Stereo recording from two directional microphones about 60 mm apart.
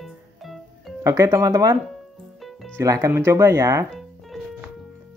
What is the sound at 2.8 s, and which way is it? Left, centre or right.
Speech, right.